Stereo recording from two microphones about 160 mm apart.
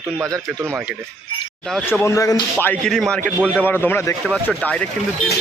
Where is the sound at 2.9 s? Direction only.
5° left (ahead or behind).